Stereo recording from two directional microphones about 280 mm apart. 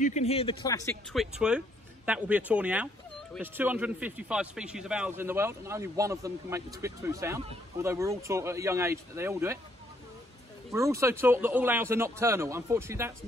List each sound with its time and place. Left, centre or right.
0.0 s a man's voice: left
1.1 s speech: centre
10.7 s speech: centre